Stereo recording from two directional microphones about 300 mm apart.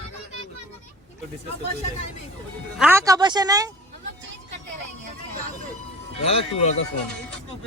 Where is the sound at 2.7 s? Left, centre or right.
Centre.